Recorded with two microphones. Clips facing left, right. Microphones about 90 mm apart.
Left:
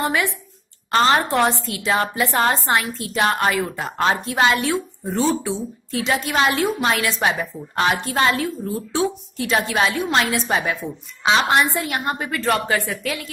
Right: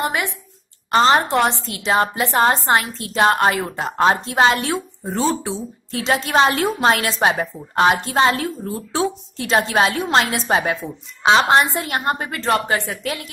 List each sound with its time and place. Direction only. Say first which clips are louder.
0.0 s a woman's voice: left 1 dB; 20° right (ahead or behind)